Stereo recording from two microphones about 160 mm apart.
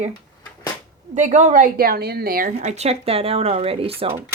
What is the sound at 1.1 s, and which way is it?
A woman's voice, 50° right (ahead or behind).